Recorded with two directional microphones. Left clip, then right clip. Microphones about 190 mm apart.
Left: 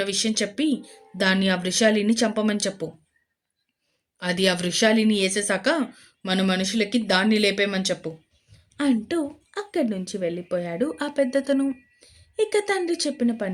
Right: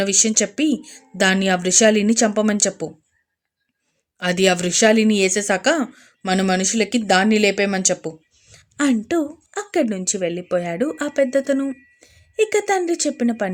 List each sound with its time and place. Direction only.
0.0 s a woman's voice: 30° right (ahead or behind)
4.2 s a woman's voice: 25° right (ahead or behind)